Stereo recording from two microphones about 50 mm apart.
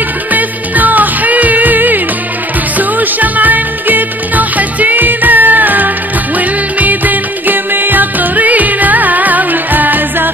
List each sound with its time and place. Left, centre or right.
0.3 s music: right